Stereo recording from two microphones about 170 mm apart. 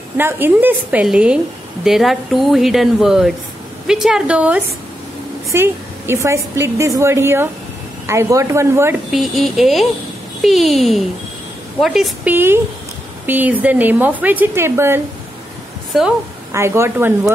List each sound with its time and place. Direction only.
0.2 s a woman's voice: 10° right (ahead or behind)
9.1 s a woman's voice: centre (ahead or behind)
15.9 s speech: centre (ahead or behind)
16.5 s a woman's voice: 15° right (ahead or behind)